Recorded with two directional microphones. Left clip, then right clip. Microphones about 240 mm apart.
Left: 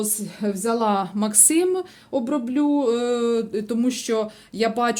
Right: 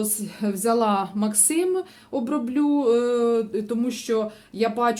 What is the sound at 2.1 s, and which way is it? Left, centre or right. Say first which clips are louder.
Speech: left 2 dB; centre.